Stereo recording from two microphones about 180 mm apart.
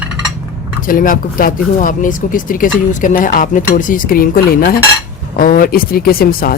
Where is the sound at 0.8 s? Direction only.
50° left (ahead or behind).